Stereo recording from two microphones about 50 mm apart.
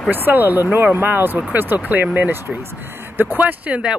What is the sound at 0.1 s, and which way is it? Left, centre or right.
Speech, right.